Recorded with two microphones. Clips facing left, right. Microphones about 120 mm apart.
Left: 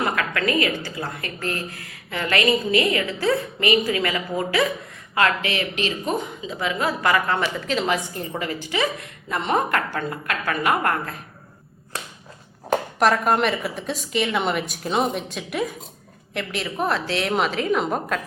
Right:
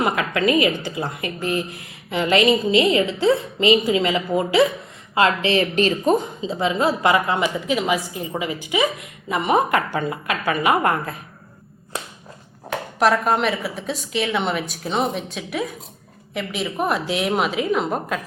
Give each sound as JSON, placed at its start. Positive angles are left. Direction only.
{"t": 0.0, "sound": "a woman's voice", "side_deg": -20}
{"t": 13.0, "sound": "a woman's voice", "side_deg": 0}